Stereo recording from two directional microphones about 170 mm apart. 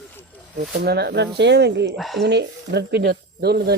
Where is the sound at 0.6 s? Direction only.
70° right (ahead or behind); by 1.9 s 90° right.